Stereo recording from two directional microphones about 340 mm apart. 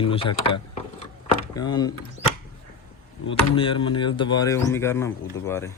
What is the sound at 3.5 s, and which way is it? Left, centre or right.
Speech, centre.